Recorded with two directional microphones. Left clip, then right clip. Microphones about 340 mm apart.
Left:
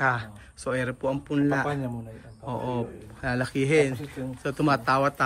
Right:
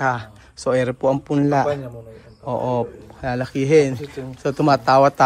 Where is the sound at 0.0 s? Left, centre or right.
Centre.